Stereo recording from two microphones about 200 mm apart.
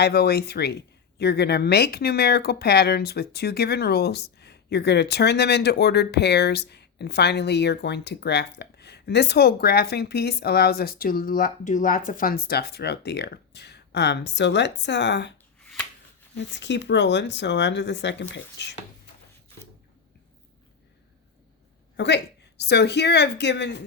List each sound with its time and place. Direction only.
0.0 s speech: 55° left (ahead or behind)
15.6 s shuffling cards: 5° left (ahead or behind)
16.3 s speech: 60° left (ahead or behind)
21.9 s speech: 60° left (ahead or behind)